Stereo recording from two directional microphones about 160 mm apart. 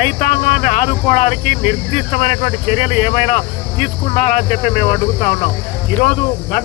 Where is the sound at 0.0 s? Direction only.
45° left (ahead or behind).